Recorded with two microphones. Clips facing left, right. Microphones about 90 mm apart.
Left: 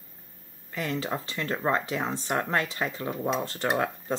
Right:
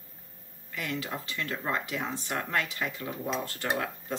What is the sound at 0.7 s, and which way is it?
Speech, 30° left (ahead or behind).